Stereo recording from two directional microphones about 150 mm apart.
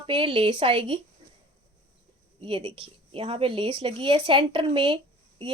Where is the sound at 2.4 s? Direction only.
35° right (ahead or behind).